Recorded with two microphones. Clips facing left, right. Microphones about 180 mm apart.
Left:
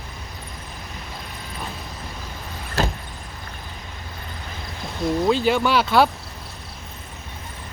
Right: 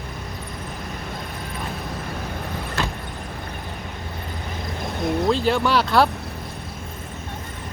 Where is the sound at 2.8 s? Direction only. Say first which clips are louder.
Left 4 dB; 40° left (ahead or behind).